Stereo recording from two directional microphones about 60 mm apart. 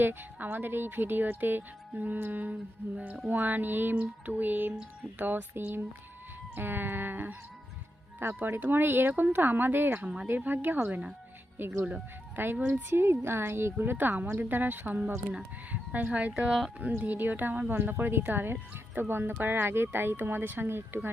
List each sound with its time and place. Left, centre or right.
0.0 s a woman's voice: right
12.5 s a woman's voice: right
12.9 s a woman's voice: right
16.5 s speech: centre
17.0 s a woman's voice: right